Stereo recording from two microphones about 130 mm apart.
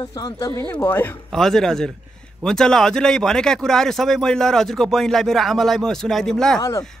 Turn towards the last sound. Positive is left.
turn(degrees=5)  # may be behind; listen again after turning